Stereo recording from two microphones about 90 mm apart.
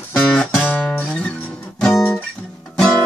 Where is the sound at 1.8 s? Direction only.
5° left (ahead or behind).